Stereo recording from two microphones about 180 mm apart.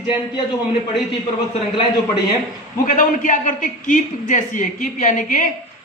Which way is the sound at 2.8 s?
50° left (ahead or behind).